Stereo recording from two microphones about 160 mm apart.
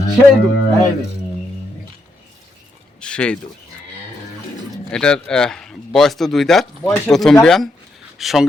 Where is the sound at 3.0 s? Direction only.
5° left (ahead or behind).